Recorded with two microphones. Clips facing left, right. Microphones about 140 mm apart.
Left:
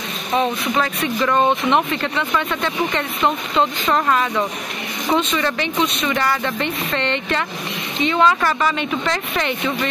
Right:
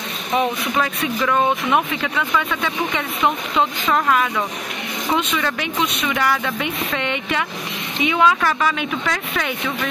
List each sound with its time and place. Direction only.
0.7 s speech: centre (ahead or behind)